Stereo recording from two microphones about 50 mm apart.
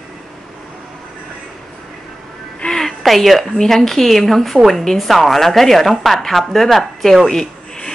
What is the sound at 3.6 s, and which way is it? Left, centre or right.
A woman's voice, centre.